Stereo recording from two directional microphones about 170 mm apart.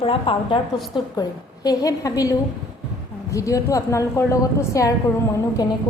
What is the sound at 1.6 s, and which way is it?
A woman's voice, 20° left (ahead or behind).